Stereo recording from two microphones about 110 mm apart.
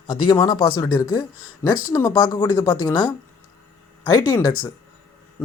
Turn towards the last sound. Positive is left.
turn(degrees=35)  # may be behind; listen again after turning